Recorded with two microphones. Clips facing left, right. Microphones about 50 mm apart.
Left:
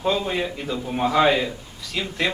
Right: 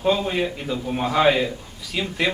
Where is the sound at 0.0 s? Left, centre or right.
Centre.